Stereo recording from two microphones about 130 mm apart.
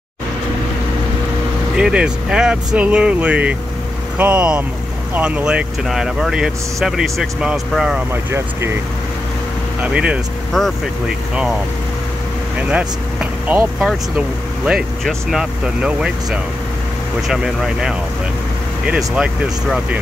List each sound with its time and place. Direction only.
1.8 s speech: 5° right (ahead or behind)
8.1 s speech: 20° right (ahead or behind)
9.8 s speech: 10° right (ahead or behind)
12.6 s speech: 10° right (ahead or behind)